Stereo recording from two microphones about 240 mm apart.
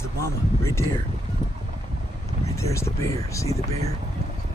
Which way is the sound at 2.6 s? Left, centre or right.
Centre.